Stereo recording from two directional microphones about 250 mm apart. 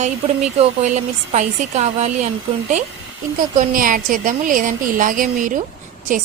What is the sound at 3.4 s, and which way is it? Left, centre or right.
A woman's voice, right.